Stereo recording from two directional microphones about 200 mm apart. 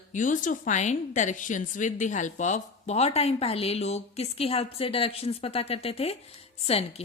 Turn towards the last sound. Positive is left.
turn(degrees=30)  # may be behind; listen again after turning